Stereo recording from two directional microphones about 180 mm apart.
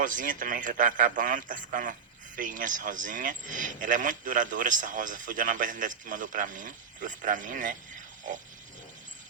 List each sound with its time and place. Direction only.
0.0 s a man's voice: 50° right (ahead or behind)